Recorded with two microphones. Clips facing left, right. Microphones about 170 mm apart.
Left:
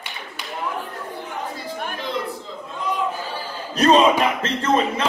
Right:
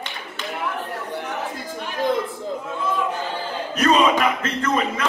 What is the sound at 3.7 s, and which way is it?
Speech, 30° left (ahead or behind).